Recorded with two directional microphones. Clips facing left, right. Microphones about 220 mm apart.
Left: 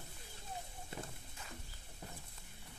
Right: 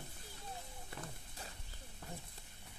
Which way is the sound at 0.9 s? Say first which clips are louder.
Left 2 dB; 25° left (ahead or behind).